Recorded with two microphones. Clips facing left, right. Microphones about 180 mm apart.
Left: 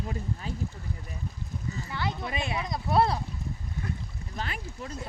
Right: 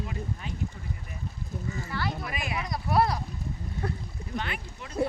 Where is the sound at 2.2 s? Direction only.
25° left (ahead or behind).